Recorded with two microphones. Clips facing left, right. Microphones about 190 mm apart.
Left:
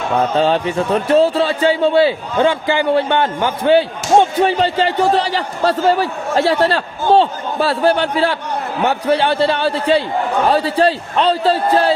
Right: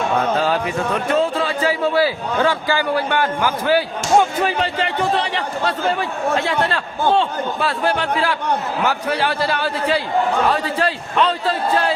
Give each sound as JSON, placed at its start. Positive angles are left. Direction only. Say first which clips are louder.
{"t": 0.3, "sound": "a man's voice", "louder": "left 4 dB", "side_deg": 25}